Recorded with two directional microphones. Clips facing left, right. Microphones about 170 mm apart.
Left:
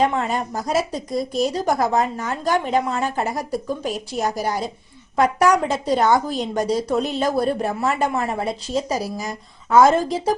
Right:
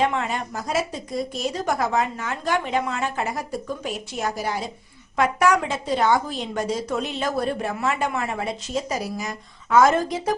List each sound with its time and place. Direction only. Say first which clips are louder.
0.0 s a woman's voice: left 3 dB; 35° left (ahead or behind)